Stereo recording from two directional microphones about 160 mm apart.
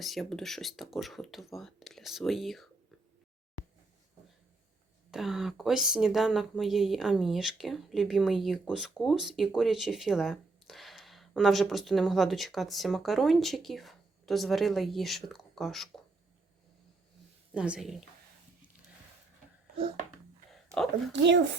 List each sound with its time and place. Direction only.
0.0 s speech: centre (ahead or behind)
5.1 s speech: centre (ahead or behind)
17.5 s a woman's voice: 5° right (ahead or behind)
21.1 s speech: 90° right